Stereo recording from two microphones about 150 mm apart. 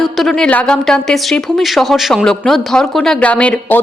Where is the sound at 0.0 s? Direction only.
Centre (ahead or behind).